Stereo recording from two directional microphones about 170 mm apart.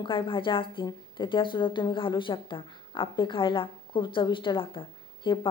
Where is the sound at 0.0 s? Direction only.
30° left (ahead or behind).